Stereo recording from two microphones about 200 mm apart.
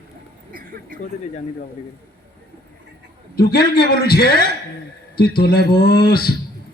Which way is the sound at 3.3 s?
50° left (ahead or behind).